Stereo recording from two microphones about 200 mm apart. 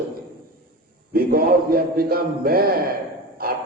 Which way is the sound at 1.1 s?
45° right (ahead or behind).